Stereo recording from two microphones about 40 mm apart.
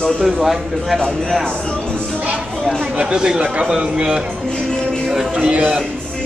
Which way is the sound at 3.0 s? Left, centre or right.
Right.